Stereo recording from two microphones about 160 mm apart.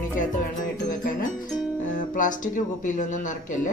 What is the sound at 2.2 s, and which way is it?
Speech, 55° left (ahead or behind).